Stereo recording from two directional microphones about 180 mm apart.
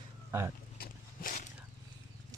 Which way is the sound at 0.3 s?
15° right (ahead or behind).